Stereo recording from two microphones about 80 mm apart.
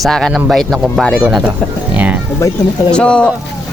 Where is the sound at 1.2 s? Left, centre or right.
Centre.